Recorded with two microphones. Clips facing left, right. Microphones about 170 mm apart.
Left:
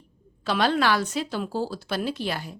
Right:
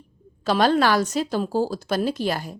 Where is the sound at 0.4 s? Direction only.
40° right (ahead or behind).